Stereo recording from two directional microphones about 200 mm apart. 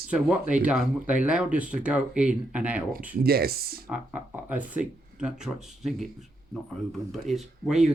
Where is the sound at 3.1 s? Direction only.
50° right (ahead or behind).